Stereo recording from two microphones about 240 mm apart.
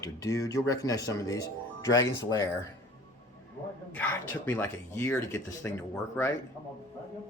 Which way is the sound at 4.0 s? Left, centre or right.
Centre.